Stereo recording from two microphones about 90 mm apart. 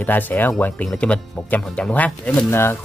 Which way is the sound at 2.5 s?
25° left (ahead or behind).